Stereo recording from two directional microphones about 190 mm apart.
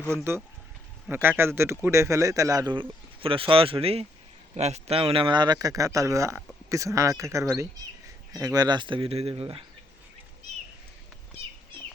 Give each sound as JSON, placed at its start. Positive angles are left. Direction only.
{"t": 1.0, "sound": "speech", "side_deg": -10}